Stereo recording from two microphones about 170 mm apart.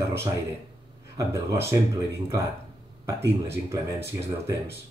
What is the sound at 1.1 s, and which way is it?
Speech, 15° right (ahead or behind).